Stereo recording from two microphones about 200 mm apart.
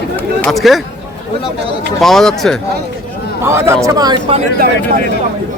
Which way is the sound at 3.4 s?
15° right (ahead or behind).